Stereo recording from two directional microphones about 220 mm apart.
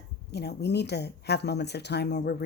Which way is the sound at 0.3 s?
50° left (ahead or behind).